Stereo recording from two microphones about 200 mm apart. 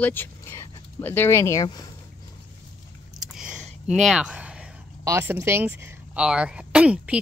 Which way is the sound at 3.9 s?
Centre (ahead or behind).